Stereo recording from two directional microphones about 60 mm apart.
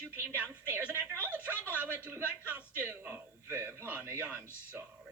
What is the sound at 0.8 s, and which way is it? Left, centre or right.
Music, right.